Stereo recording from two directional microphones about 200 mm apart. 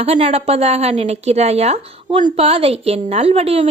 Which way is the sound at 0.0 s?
30° right (ahead or behind).